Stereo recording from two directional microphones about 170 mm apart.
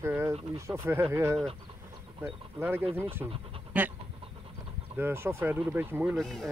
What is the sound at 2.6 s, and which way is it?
Speech, 15° right (ahead or behind).